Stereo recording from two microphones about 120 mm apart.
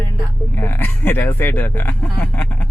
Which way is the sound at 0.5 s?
15° left (ahead or behind).